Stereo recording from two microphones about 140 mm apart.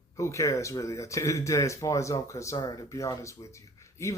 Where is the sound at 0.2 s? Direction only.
20° left (ahead or behind).